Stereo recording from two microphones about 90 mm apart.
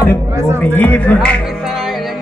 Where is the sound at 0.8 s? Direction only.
20° left (ahead or behind).